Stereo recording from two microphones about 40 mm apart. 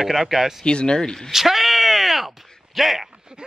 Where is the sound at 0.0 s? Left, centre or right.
Centre.